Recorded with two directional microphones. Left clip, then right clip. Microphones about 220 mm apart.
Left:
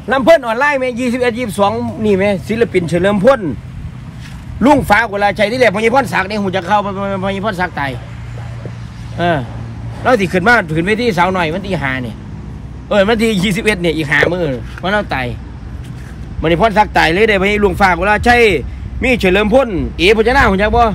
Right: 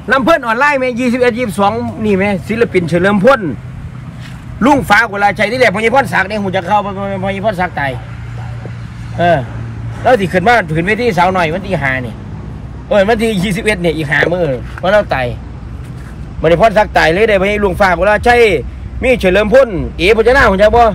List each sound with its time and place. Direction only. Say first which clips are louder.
0.1 s a man's voice: left 1 dB; 45° left (ahead or behind)
4.7 s a man's voice: right 2 dB; 50° left (ahead or behind); by 7.2 s 35° left (ahead or behind)
7.4 s a man's voice: right 6 dB; 5° left (ahead or behind)
10.7 s a man's voice: right 1 dB; centre (ahead or behind)
13.4 s speech: even; 30° left (ahead or behind)
13.7 s a man's voice: even; 5° left (ahead or behind)
16.3 s a man's voice: right 3 dB; 5° left (ahead or behind)